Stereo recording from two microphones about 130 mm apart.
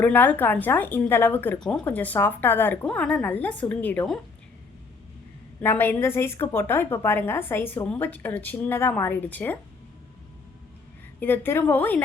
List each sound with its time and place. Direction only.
0.0 s a woman's voice: 15° left (ahead or behind)
5.6 s a woman's voice: 15° left (ahead or behind)
11.2 s a woman's voice: 15° left (ahead or behind)